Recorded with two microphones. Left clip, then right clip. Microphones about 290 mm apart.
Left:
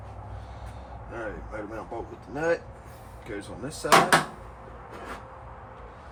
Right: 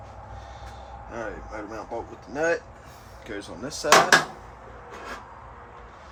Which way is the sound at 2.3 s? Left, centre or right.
Right.